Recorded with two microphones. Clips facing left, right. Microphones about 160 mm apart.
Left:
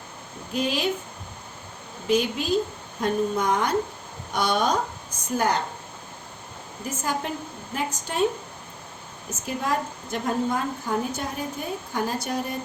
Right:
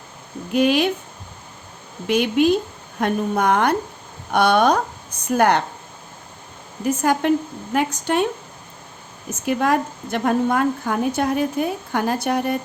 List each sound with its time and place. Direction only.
0.5 s a woman's voice: 70° right (ahead or behind)
2.0 s a woman's voice: 70° right (ahead or behind)
7.0 s a woman's voice: 70° right (ahead or behind)
9.5 s a woman's voice: 70° right (ahead or behind)